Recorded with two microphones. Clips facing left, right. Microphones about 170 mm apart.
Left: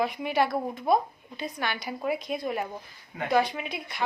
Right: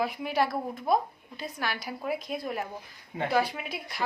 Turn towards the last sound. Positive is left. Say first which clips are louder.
# left 2 dB
turn(degrees=0)  # may be behind; listen again after turning